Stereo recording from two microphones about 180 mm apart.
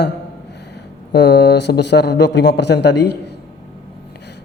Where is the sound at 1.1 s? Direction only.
70° left (ahead or behind).